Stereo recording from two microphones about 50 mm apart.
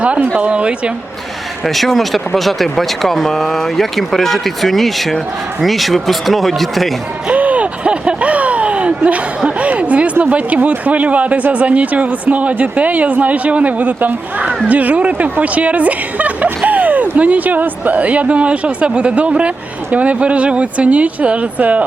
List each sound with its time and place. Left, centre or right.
0.3 s speech: right
1.6 s speech: centre
7.3 s a sound: right
9.0 s speech: right